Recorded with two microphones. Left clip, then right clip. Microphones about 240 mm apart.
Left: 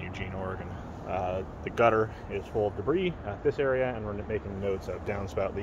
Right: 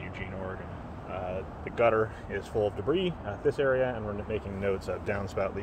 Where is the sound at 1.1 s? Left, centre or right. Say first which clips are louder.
Left 4 dB; left.